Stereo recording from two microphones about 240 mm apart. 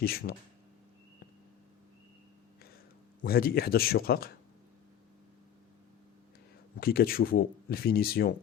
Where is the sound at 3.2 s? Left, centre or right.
Left.